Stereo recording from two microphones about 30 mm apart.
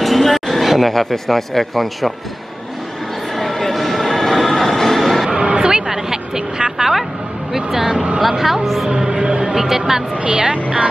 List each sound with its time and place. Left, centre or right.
0.0 s speech: centre
3.3 s train: centre
5.6 s a sound: right; by 7.1 s centre
7.5 s speech: centre
8.2 s speech: centre
8.8 s music: right
9.5 s speech: centre
10.2 s speech: right